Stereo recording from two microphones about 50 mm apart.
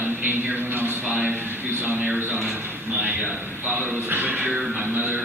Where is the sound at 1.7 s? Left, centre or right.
Right.